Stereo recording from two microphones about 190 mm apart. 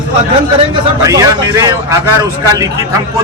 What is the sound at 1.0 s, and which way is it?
Speech, 15° right (ahead or behind).